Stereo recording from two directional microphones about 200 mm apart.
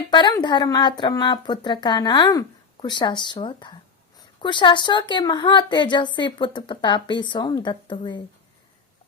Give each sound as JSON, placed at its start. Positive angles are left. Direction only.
{"t": 0.1, "sound": "speech", "side_deg": 20}